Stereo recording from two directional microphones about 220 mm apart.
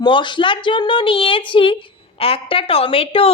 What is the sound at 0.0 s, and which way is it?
Speech, 20° left (ahead or behind).